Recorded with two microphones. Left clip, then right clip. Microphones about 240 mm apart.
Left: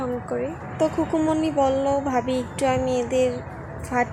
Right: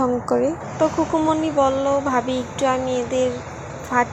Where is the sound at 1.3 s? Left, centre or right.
Centre.